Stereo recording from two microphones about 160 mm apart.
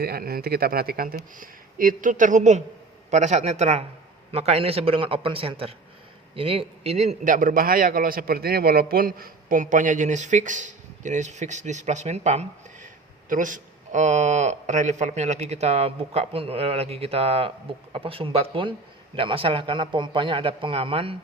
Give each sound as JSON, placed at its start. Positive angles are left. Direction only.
{"t": 0.0, "sound": "a man's voice", "side_deg": -75}